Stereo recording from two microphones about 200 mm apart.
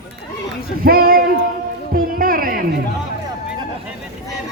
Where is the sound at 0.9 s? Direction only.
50° right (ahead or behind).